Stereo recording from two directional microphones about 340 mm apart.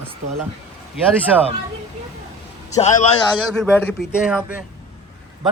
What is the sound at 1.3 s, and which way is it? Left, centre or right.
Speech, centre.